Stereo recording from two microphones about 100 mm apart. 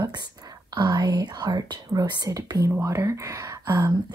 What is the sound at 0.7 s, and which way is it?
Speech, 40° right (ahead or behind).